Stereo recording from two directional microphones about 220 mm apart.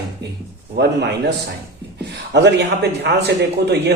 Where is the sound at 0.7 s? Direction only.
50° right (ahead or behind).